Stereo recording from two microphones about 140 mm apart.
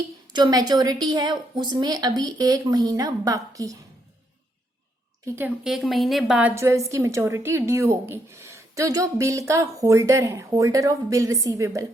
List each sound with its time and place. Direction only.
0.3 s a woman's voice: 30° right (ahead or behind)
5.2 s a woman's voice: 15° right (ahead or behind)
5.6 s a woman's voice: centre (ahead or behind)
6.5 s a woman's voice: 20° right (ahead or behind)